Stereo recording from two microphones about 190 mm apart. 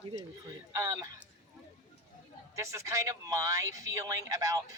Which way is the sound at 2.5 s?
15° right (ahead or behind).